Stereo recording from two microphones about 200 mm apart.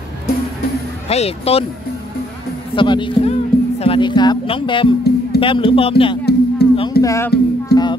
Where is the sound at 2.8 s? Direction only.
25° left (ahead or behind).